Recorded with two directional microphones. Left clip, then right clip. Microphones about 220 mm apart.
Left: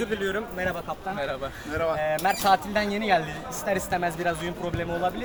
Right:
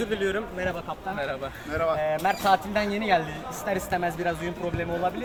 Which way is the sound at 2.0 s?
5° right (ahead or behind).